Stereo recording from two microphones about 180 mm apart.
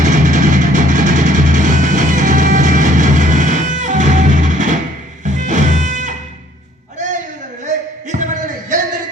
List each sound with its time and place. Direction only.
0.0 s music: 45° right (ahead or behind)
8.1 s music: 45° right (ahead or behind)